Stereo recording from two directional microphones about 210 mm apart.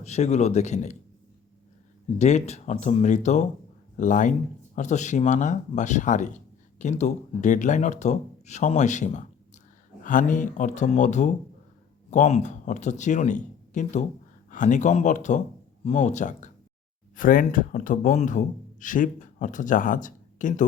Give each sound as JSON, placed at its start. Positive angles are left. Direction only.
{"t": 0.0, "sound": "a man's voice", "side_deg": 30}
{"t": 2.1, "sound": "a man's voice", "side_deg": 35}